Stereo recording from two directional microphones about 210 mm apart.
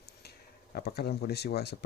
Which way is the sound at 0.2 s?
50° left (ahead or behind).